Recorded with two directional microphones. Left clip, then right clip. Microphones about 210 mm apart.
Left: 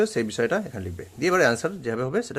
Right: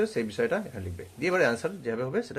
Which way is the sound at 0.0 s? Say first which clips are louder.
Left 4 dB; 35° left (ahead or behind).